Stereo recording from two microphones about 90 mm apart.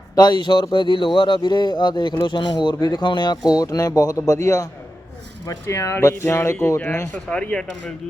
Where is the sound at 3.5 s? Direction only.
45° left (ahead or behind).